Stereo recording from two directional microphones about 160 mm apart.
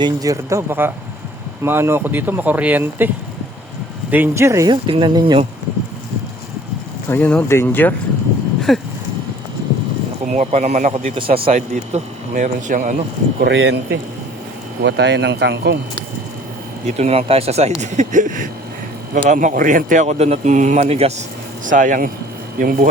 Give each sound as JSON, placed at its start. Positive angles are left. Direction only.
{"t": 0.0, "sound": "speech", "side_deg": -20}
{"t": 4.1, "sound": "speech", "side_deg": -15}
{"t": 7.1, "sound": "speech", "side_deg": 10}
{"t": 8.7, "sound": "a sound", "side_deg": 0}
{"t": 10.3, "sound": "speech", "side_deg": -45}
{"t": 13.4, "sound": "speech", "side_deg": -90}
{"t": 16.8, "sound": "speech", "side_deg": -40}
{"t": 21.6, "sound": "speech", "side_deg": -55}